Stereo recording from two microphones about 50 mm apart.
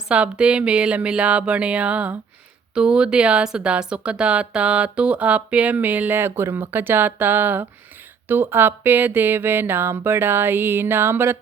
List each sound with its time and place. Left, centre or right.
0.1 s speech: right